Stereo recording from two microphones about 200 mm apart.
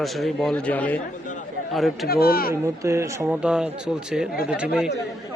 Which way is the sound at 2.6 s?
15° right (ahead or behind).